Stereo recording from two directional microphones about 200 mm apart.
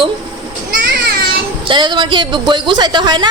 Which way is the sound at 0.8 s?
55° right (ahead or behind).